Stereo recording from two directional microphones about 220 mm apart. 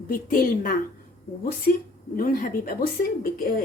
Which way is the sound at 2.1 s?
40° left (ahead or behind).